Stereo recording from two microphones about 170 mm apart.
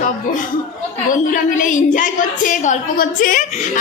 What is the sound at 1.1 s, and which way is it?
A woman's voice, 50° left (ahead or behind).